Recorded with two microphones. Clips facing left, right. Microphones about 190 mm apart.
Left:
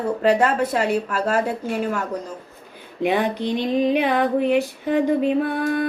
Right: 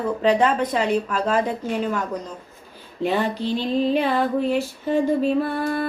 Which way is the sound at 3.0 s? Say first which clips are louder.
Left 2 dB; 15° left (ahead or behind).